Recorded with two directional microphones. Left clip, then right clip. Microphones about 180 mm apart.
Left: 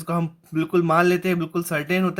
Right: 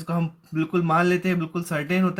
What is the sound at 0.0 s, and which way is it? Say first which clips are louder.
Speech: left 3 dB; 35° left (ahead or behind).